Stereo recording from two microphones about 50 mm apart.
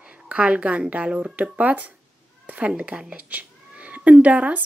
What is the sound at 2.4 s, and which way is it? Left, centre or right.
Cat, right.